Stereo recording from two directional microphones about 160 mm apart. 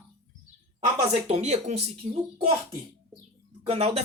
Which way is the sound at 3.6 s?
40° right (ahead or behind).